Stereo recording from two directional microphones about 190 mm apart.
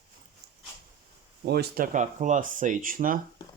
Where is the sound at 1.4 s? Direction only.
55° right (ahead or behind).